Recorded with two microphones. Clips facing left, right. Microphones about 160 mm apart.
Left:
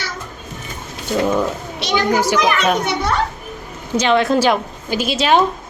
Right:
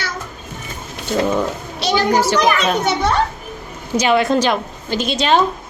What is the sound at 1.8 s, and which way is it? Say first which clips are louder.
Speech: right 2 dB; 35° right (ahead or behind).